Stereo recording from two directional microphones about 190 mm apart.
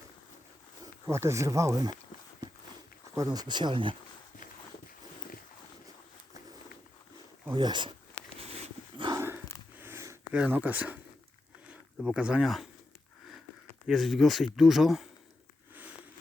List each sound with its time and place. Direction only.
1.0 s speech: 15° right (ahead or behind)
3.2 s speech: 20° right (ahead or behind)
7.5 s speech: 25° right (ahead or behind)
8.4 s dog: 30° right (ahead or behind)
9.7 s a sound: 10° right (ahead or behind)
11.7 s speech: 5° right (ahead or behind)
13.8 s speech: centre (ahead or behind)
15.7 s a sound: 10° right (ahead or behind)